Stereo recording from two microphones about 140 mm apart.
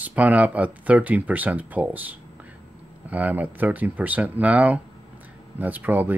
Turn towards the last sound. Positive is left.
turn(degrees=-15)  # may be behind; listen again after turning